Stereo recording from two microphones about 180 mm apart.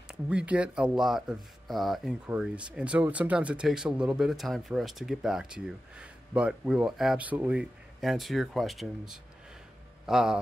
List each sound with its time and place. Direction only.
0.1 s speech: 5° right (ahead or behind)